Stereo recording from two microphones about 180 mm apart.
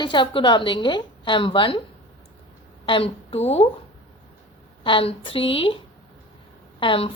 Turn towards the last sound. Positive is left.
turn(degrees=30)  # may be behind; listen again after turning